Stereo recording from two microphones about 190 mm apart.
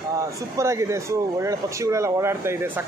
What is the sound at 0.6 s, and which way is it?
Speech, 15° right (ahead or behind).